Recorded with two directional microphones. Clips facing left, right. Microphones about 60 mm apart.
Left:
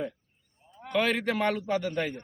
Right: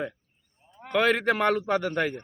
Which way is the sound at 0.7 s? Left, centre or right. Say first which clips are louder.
Even; right.